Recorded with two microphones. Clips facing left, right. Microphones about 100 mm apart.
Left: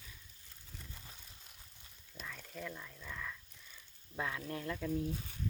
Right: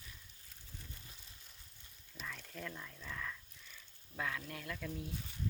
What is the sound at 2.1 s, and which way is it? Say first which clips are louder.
Speech: left 1 dB; 5° left (ahead or behind).